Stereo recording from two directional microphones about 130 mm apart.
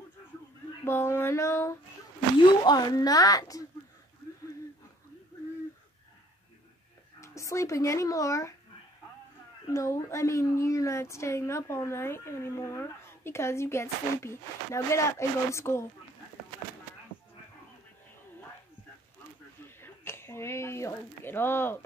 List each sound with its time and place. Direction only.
0.8 s a woman's voice: 20° left (ahead or behind)
2.6 s a woman's voice: 30° left (ahead or behind)
7.2 s speech: 25° left (ahead or behind)
9.7 s a woman's voice: 25° left (ahead or behind)
19.8 s speech: 20° left (ahead or behind)